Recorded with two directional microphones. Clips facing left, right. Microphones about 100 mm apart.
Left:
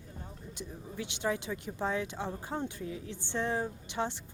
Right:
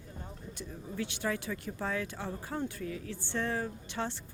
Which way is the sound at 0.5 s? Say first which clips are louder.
Right 1 dB; 20° left (ahead or behind).